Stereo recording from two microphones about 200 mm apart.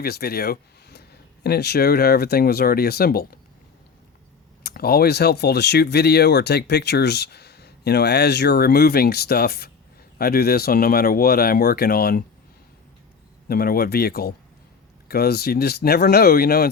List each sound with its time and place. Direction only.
0.0 s speech: 50° left (ahead or behind)
4.6 s speech: 50° left (ahead or behind)
13.5 s speech: 50° left (ahead or behind)